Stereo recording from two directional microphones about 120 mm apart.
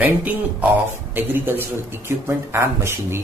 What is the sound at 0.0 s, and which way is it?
Speech, 15° right (ahead or behind).